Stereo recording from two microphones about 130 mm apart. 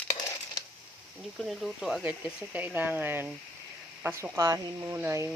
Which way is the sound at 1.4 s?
Centre (ahead or behind).